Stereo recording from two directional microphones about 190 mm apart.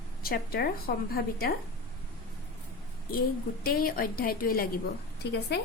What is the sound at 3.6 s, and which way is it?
A woman's voice, 50° left (ahead or behind).